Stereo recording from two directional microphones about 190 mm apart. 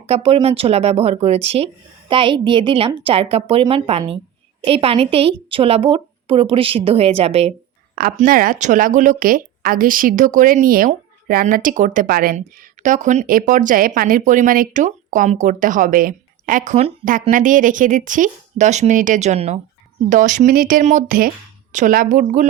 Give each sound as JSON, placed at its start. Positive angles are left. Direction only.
{"t": 0.0, "sound": "speech", "side_deg": -30}
{"t": 8.1, "sound": "speech", "side_deg": -45}